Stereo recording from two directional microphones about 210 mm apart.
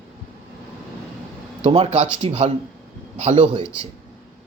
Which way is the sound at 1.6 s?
30° right (ahead or behind).